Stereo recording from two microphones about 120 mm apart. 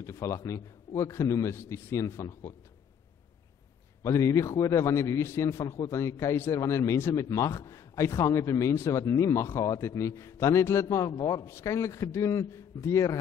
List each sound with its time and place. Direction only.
0.0 s a man's voice: 25° left (ahead or behind)
4.0 s a man's voice: 25° left (ahead or behind)